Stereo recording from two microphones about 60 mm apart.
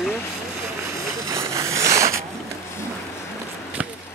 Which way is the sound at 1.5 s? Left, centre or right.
Right.